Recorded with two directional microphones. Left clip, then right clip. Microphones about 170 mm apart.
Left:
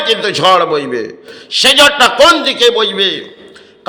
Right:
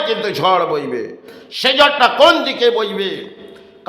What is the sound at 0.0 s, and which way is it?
A man's voice, 10° left (ahead or behind).